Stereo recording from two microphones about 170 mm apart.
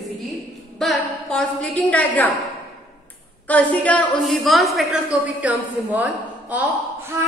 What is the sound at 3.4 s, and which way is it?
A woman's voice, 10° left (ahead or behind).